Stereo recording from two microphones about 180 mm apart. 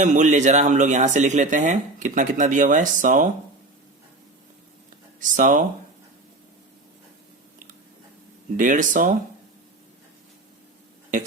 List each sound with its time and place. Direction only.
0.0 s speech: 45° right (ahead or behind)
5.2 s speech: 50° right (ahead or behind)
8.5 s speech: 45° right (ahead or behind)